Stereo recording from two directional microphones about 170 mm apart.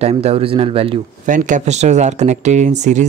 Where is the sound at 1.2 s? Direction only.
50° right (ahead or behind).